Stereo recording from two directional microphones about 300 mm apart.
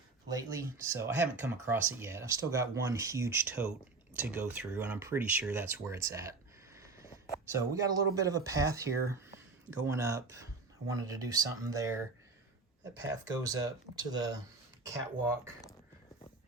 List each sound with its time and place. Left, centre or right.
0.3 s speech: centre